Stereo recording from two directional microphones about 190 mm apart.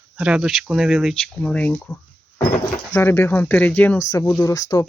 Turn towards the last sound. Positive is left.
turn(degrees=15)  # may be behind; listen again after turning